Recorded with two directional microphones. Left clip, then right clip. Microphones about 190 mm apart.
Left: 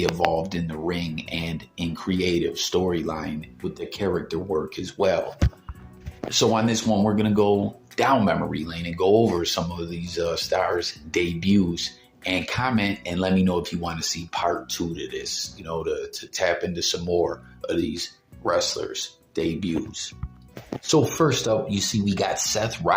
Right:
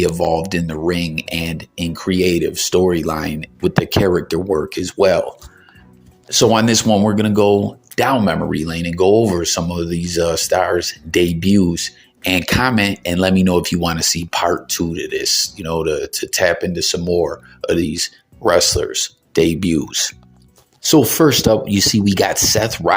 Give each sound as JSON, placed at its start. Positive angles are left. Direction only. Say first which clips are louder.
{"t": 0.0, "sound": "speech", "louder": "right 6 dB", "side_deg": -40}
{"t": 6.2, "sound": "speech", "louder": "right 7 dB", "side_deg": -35}
{"t": 6.5, "sound": "speech", "louder": "right 9 dB", "side_deg": -50}